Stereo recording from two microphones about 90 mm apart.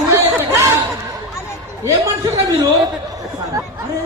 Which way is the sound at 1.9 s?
35° right (ahead or behind).